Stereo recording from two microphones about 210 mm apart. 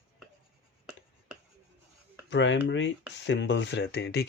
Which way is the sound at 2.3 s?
60° left (ahead or behind).